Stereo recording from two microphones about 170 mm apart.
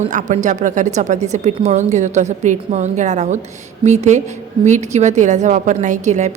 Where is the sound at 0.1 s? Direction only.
45° right (ahead or behind).